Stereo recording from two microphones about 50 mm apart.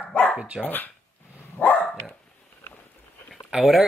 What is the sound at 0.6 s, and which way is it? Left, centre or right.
Speech, left.